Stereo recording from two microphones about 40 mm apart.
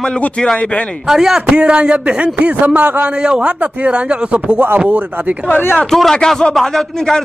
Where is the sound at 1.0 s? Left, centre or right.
Centre.